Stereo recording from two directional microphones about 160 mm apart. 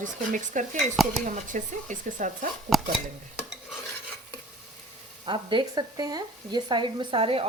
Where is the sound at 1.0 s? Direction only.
Centre (ahead or behind).